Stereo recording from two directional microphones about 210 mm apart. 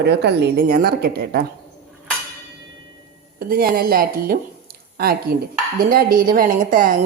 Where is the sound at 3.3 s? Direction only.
45° right (ahead or behind).